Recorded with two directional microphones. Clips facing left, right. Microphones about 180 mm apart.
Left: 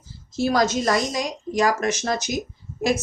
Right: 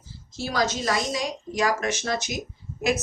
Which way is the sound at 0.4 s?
45° left (ahead or behind).